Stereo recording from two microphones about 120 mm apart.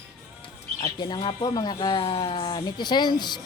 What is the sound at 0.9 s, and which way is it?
Speech, 35° left (ahead or behind).